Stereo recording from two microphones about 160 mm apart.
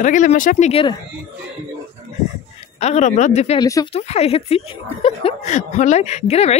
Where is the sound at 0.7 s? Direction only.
35° left (ahead or behind).